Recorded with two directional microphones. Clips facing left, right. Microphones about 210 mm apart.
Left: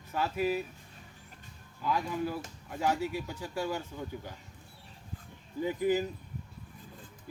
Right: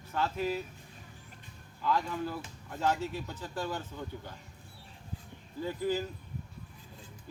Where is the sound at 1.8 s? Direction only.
10° left (ahead or behind).